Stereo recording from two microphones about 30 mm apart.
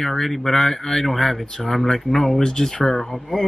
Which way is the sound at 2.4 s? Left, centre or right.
Centre.